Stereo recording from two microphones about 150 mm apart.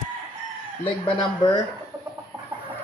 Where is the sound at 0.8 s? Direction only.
30° left (ahead or behind).